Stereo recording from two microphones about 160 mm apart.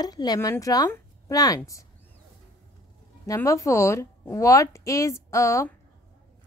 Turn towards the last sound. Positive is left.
turn(degrees=20)  # may be behind; listen again after turning